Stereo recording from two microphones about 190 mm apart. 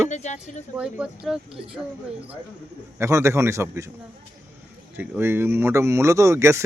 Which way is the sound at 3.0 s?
15° right (ahead or behind).